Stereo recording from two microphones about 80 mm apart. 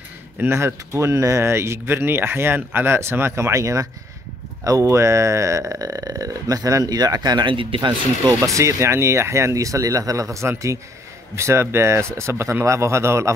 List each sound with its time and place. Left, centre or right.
0.4 s speech: right
8.3 s speech: right